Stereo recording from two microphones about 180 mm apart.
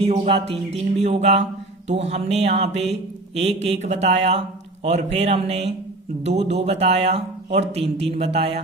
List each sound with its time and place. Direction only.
0.1 s speech: 35° right (ahead or behind)